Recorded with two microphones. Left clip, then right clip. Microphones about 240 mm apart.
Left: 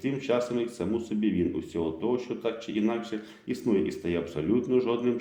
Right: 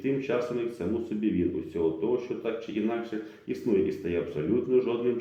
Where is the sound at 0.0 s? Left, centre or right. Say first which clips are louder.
Even; left.